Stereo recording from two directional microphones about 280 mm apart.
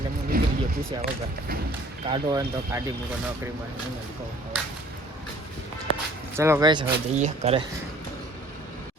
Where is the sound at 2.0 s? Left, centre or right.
Centre.